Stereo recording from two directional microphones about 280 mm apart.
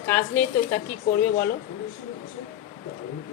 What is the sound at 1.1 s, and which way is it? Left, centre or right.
Speech, left.